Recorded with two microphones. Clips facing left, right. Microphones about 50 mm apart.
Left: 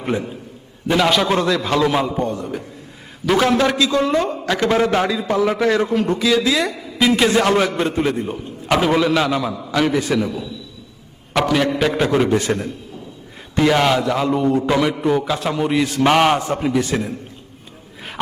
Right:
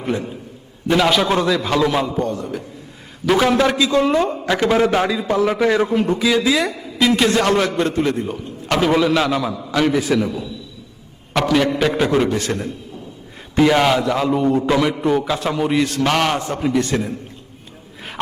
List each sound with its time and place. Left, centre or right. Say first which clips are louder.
0.9 s a man's voice: even; centre
2.0 s a man's voice: even; centre
2.3 s a man's voice: even; centre
3.9 s a woman's voice: right 2 dB; centre
4.3 s a man's voice: right 1 dB; centre
7.0 s a man's voice: even; centre
12.3 s a man's voice: left 3 dB; centre
13.6 s a man's voice: right 1 dB; centre
16.0 s a man's voice: left 3 dB; centre